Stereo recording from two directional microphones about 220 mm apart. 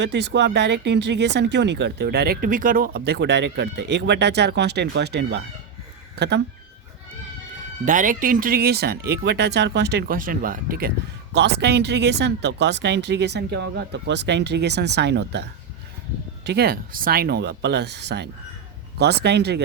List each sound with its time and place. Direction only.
0.0 s speech: 50° right (ahead or behind)
7.9 s speech: 35° right (ahead or behind)